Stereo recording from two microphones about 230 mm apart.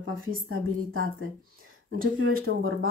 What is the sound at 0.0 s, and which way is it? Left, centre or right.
A woman's voice, right.